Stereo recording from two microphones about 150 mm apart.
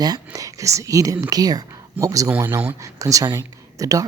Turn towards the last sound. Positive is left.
turn(degrees=-20)  # may be behind; listen again after turning